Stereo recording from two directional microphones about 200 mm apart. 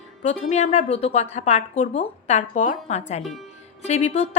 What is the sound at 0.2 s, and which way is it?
A woman's voice, 35° left (ahead or behind).